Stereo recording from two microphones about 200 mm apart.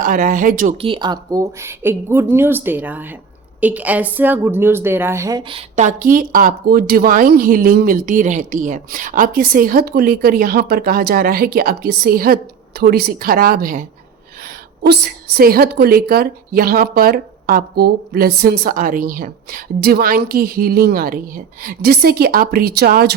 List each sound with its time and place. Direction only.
0.0 s a woman's voice: 45° right (ahead or behind)
0.8 s a woman's voice: 25° right (ahead or behind); by 23.1 s 50° right (ahead or behind)